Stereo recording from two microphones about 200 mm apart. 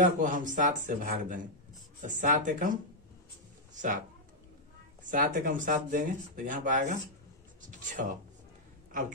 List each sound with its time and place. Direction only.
0.0 s speech: 40° right (ahead or behind)
5.0 s speech: 45° right (ahead or behind)